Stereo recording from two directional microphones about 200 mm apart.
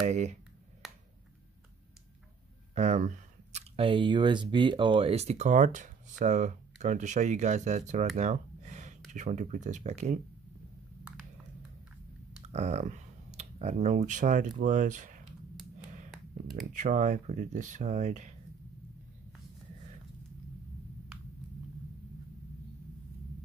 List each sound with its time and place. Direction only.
0.0 s speech: 35° right (ahead or behind)
0.8 s a sound: centre (ahead or behind)
2.7 s speech: 35° right (ahead or behind)
8.2 s gasp: 35° right (ahead or behind)
9.1 s speech: 35° right (ahead or behind)
12.4 s speech: 35° right (ahead or behind)
16.6 s speech: 40° right (ahead or behind)